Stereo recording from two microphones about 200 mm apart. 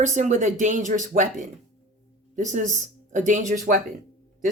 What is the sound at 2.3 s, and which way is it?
Speech, 40° right (ahead or behind).